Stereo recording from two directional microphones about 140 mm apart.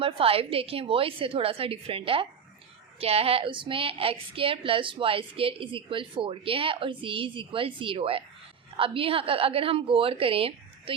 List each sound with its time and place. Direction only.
0.0 s a woman's voice: 40° right (ahead or behind)